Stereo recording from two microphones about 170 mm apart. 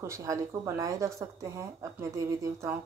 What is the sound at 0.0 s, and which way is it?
A woman's voice, 15° right (ahead or behind).